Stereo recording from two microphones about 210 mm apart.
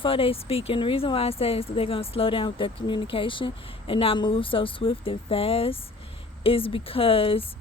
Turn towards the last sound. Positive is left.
turn(degrees=25)  # may be behind; listen again after turning